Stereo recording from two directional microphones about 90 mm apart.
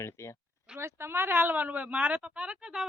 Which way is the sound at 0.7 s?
30° right (ahead or behind).